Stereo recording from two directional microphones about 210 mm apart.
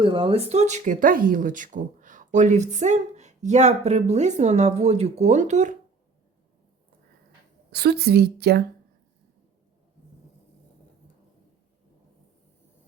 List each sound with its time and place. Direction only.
0.0 s speech: 25° right (ahead or behind)
7.7 s a woman's voice: 50° right (ahead or behind)